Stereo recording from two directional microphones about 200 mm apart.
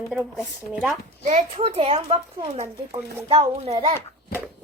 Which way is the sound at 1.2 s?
35° right (ahead or behind).